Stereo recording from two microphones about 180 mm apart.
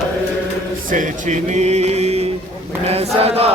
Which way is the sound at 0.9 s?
45° right (ahead or behind).